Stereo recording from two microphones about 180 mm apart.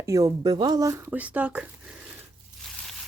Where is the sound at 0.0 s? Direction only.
20° right (ahead or behind).